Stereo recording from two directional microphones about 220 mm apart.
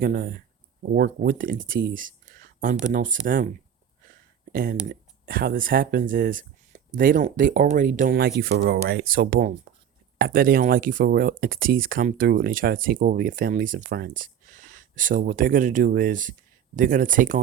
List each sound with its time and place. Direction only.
0.0 s speech: 40° right (ahead or behind)
4.5 s speech: 40° right (ahead or behind)